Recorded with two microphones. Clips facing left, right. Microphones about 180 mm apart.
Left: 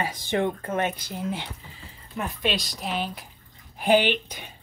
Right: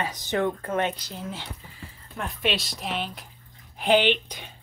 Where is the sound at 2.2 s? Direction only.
Centre (ahead or behind).